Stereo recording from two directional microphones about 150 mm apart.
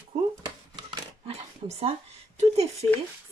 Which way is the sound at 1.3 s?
45° right (ahead or behind).